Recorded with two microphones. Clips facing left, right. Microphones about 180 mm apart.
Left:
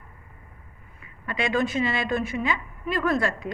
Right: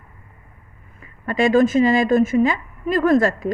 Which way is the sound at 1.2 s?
45° right (ahead or behind).